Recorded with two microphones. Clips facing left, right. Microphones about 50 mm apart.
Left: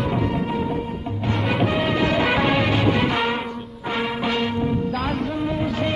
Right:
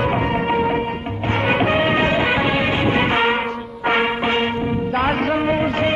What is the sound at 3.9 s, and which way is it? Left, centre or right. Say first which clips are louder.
Music: right 6 dB; right.